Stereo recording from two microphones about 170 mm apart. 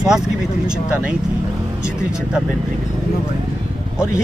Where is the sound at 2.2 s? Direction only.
5° right (ahead or behind).